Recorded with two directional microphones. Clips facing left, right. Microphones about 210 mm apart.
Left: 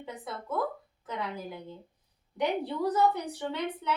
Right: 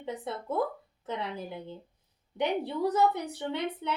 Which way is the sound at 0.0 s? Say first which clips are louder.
Right 4 dB; 25° right (ahead or behind).